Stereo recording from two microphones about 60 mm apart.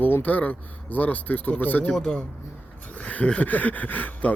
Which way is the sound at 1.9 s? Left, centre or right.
Centre.